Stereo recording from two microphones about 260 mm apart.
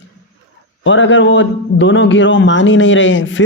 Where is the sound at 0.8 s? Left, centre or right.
Left.